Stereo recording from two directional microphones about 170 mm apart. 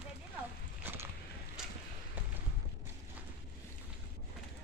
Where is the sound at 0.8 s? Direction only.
10° right (ahead or behind).